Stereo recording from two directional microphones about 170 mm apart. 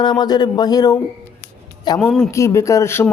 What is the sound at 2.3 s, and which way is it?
Speech, 15° left (ahead or behind).